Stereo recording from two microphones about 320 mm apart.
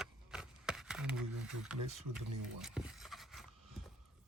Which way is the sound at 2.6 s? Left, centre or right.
Centre.